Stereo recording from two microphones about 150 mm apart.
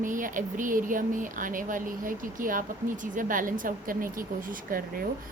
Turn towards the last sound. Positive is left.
turn(degrees=-70)  # may be behind; listen again after turning